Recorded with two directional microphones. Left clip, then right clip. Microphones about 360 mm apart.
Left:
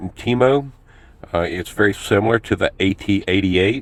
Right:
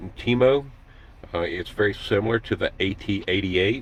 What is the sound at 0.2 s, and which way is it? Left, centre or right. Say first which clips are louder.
Speech: left 3 dB; left.